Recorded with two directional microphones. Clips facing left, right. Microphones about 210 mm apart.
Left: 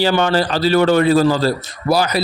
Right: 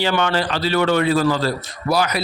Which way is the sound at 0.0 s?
35° left (ahead or behind).